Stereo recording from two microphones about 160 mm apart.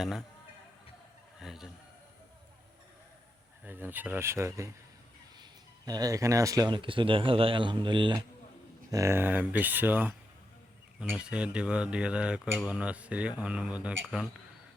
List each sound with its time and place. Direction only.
0.0 s speech: centre (ahead or behind)
1.4 s a sound: centre (ahead or behind)
3.7 s speech: 10° right (ahead or behind); by 8.2 s 30° right (ahead or behind)
8.9 s speech: 20° right (ahead or behind)
11.2 s speech: 5° right (ahead or behind)